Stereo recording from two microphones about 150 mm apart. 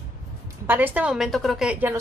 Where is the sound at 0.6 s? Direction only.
15° right (ahead or behind).